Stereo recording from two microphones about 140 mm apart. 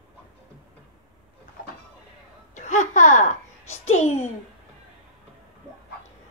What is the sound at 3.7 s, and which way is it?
Babbling, 55° left (ahead or behind).